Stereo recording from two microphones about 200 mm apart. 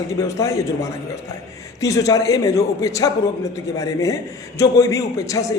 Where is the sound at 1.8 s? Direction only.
15° left (ahead or behind).